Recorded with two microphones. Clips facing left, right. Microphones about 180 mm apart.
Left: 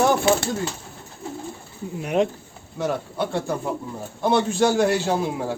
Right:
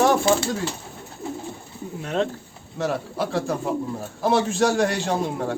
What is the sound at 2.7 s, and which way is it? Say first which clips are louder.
A man's voice: even; centre (ahead or behind).